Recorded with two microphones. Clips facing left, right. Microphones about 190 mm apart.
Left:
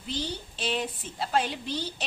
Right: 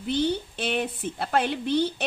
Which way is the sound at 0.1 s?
60° right (ahead or behind).